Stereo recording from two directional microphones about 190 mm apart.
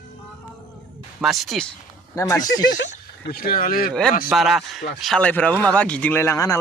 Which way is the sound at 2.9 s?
50° left (ahead or behind).